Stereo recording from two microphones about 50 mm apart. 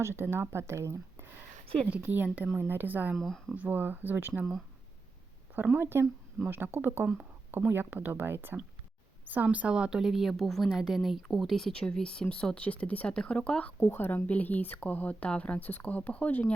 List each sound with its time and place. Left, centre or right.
0.0 s speech: right
1.9 s speech: right
2.5 s speech: right
3.2 s speech: centre
3.5 s speech: right
5.8 s speech: right
9.3 s speech: right
9.7 s a woman's voice: centre
10.0 s speech: centre
11.7 s speech: centre
12.6 s speech: left
13.8 s speech: left
14.3 s speech: left